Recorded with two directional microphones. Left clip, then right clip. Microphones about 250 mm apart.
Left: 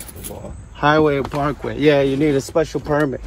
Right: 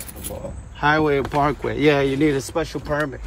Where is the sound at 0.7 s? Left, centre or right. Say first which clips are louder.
Left 3 dB; centre.